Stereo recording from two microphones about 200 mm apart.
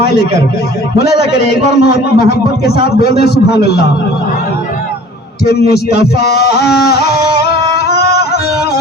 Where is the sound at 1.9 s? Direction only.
50° left (ahead or behind).